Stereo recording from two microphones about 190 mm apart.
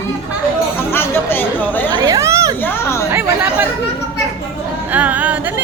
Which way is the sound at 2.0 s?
15° right (ahead or behind).